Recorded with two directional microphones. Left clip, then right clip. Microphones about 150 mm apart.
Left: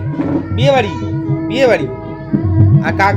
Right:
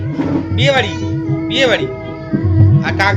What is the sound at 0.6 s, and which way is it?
Speech, 55° left (ahead or behind).